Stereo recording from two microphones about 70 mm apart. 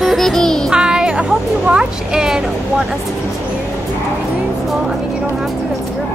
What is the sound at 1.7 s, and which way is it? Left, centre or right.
Speech, centre.